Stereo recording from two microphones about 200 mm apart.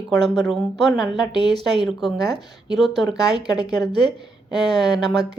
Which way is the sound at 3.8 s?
25° left (ahead or behind).